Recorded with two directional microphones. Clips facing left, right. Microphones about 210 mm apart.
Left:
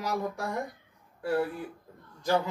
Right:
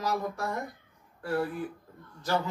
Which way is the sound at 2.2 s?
15° left (ahead or behind).